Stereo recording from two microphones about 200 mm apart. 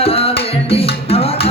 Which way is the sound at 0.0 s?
30° left (ahead or behind).